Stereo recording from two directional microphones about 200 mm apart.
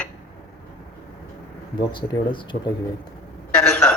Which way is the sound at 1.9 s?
25° left (ahead or behind).